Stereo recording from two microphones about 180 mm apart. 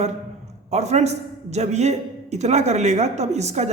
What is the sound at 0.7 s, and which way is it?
A man's voice, 40° right (ahead or behind).